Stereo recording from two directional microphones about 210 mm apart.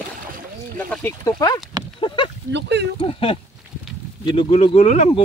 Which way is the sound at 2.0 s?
25° left (ahead or behind).